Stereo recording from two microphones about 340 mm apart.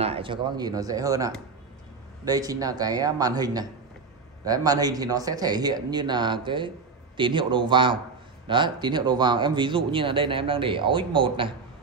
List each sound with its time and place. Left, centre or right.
0.0 s a man's voice: centre